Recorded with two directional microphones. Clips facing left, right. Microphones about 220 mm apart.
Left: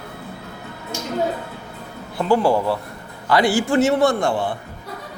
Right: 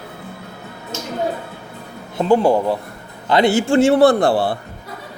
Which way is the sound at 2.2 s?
20° right (ahead or behind).